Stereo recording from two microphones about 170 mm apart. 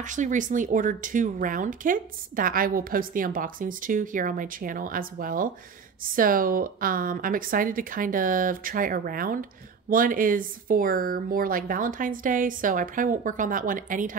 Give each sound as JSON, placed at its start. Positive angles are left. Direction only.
{"t": 0.0, "sound": "speech", "side_deg": -45}